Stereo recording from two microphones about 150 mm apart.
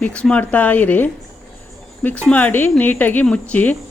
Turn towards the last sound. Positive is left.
turn(degrees=10)  # may be behind; listen again after turning